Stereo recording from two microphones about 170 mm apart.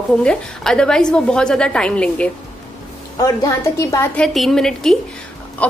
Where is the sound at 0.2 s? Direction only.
5° left (ahead or behind).